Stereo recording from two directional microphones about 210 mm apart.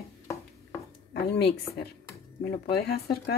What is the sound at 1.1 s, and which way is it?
Speech, 50° left (ahead or behind).